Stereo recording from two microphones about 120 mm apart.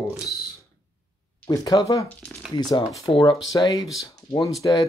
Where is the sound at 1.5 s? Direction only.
30° left (ahead or behind).